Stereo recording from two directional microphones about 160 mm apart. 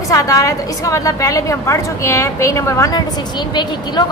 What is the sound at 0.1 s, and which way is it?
A woman's voice, 20° left (ahead or behind).